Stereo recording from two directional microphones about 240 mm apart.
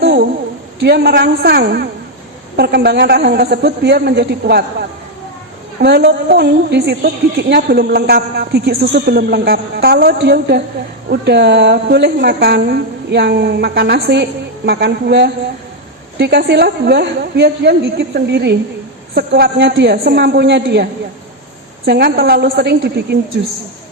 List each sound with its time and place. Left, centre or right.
0.0 s a sound: right
0.8 s a woman's voice: right
21.8 s a woman's voice: right